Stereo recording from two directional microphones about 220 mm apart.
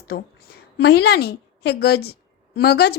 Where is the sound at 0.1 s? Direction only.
45° left (ahead or behind).